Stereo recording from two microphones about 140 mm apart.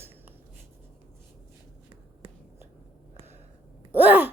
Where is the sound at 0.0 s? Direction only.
15° right (ahead or behind).